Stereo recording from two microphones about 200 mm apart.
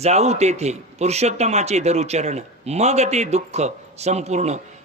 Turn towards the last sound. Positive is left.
turn(degrees=-35)  # may be behind; listen again after turning